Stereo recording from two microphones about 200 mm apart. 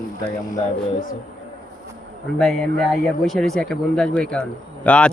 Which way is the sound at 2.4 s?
Centre (ahead or behind).